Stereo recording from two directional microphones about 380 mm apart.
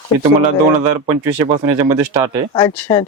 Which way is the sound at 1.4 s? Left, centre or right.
Centre.